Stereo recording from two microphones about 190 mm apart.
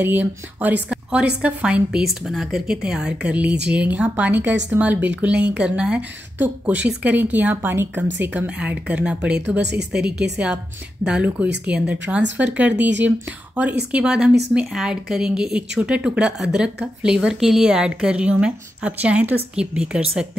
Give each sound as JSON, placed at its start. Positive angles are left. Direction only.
{"t": 0.0, "sound": "a woman's voice", "side_deg": -10}
{"t": 0.8, "sound": "a sound", "side_deg": -5}
{"t": 1.4, "sound": "a woman's voice", "side_deg": -5}
{"t": 9.6, "sound": "speech", "side_deg": -60}
{"t": 10.3, "sound": "a woman's voice", "side_deg": -5}